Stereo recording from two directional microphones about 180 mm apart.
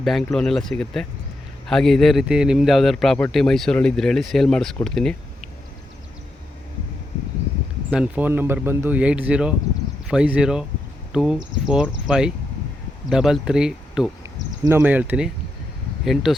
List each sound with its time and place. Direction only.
0.0 s speech: centre (ahead or behind)
7.9 s speech: 5° right (ahead or behind)
14.3 s a sound: 20° right (ahead or behind)
14.8 s speech: 10° right (ahead or behind)